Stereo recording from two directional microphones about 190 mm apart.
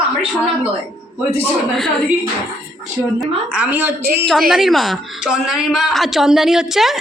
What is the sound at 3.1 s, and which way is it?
A woman's voice, 5° right (ahead or behind).